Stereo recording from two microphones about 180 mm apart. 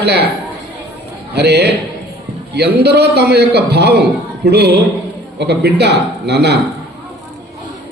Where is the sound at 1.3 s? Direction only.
65° right (ahead or behind).